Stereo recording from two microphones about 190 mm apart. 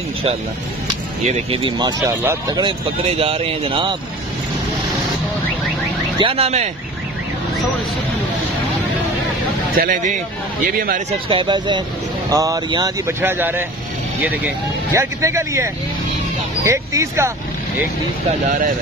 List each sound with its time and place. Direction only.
1.2 s speech: 35° right (ahead or behind)
6.1 s speech: 30° right (ahead or behind)
9.8 s speech: 45° right (ahead or behind)
11.1 s speech: 25° right (ahead or behind)